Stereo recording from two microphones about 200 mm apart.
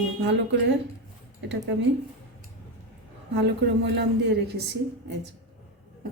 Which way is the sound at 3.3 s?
60° right (ahead or behind).